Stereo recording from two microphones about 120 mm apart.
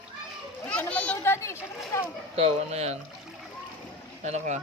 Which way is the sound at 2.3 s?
60° right (ahead or behind).